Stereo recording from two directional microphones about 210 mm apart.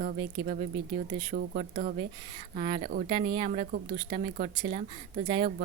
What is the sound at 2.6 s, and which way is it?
Speech, 25° right (ahead or behind).